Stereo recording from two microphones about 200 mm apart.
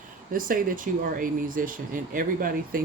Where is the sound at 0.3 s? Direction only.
45° right (ahead or behind).